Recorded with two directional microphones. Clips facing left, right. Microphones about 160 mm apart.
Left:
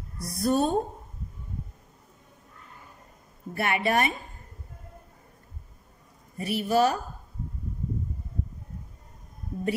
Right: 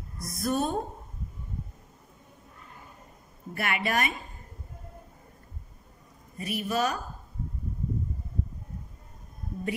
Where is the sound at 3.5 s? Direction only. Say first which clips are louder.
Left 4 dB; 30° left (ahead or behind).